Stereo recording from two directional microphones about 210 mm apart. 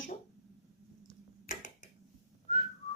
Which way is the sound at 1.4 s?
40° left (ahead or behind).